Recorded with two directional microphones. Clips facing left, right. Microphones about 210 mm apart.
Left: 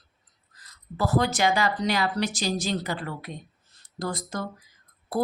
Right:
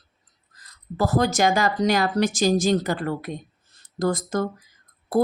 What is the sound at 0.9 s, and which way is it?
A woman's voice, 45° right (ahead or behind).